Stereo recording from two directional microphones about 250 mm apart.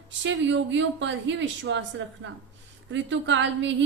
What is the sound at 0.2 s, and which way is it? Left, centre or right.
Speech, right.